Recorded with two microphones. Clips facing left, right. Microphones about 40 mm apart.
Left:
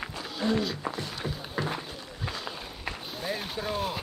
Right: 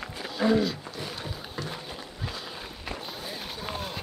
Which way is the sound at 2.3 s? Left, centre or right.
Centre.